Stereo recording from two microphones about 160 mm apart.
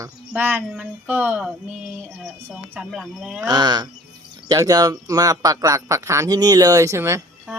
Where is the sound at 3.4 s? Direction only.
25° right (ahead or behind).